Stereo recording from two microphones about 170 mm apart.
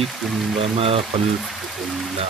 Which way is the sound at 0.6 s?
35° right (ahead or behind).